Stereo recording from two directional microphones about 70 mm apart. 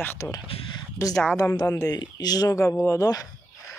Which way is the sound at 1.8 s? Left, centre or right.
Left.